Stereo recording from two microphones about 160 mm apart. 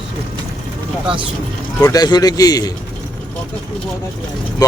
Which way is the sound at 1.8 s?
25° left (ahead or behind).